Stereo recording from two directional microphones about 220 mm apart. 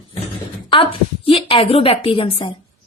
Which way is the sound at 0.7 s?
25° left (ahead or behind).